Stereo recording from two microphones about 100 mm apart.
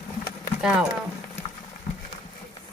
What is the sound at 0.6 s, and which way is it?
Speech, 5° right (ahead or behind).